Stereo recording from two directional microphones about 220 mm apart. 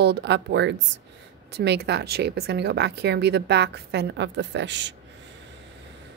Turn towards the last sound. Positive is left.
turn(degrees=-55)  # may be behind; listen again after turning